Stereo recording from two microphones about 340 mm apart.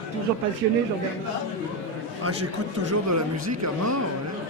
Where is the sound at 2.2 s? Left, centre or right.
Right.